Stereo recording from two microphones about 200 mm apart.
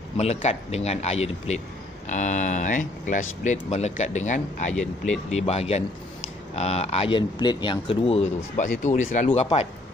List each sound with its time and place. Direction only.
0.2 s speech: 35° left (ahead or behind)